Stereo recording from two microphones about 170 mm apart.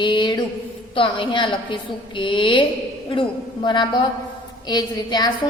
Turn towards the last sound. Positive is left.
turn(degrees=25)  # may be behind; listen again after turning